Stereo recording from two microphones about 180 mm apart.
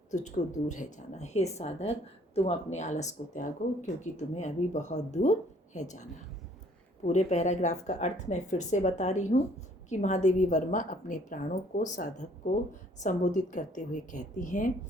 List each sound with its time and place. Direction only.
0.1 s a woman's voice: 40° left (ahead or behind)